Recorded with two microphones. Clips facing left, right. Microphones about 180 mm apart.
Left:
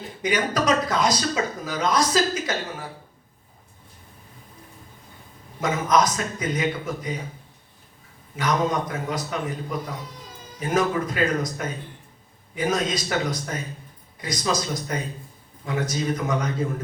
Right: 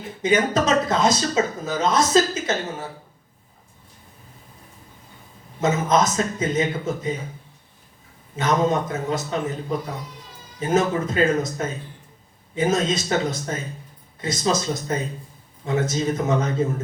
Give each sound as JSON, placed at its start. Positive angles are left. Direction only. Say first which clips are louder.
{"t": 0.2, "sound": "speech", "louder": "right 4 dB", "side_deg": -25}
{"t": 5.5, "sound": "speech", "louder": "right 2 dB", "side_deg": -25}
{"t": 8.4, "sound": "speech", "louder": "right 3 dB", "side_deg": -25}
{"t": 10.6, "sound": "speech", "louder": "right 2 dB", "side_deg": -25}